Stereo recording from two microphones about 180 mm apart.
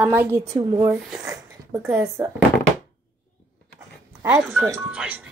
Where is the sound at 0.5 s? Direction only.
20° right (ahead or behind).